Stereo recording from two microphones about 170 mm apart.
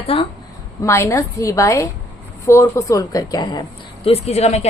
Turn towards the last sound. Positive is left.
turn(degrees=40)  # may be behind; listen again after turning